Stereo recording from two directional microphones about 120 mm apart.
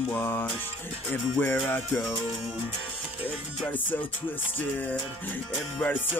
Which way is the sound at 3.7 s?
15° left (ahead or behind).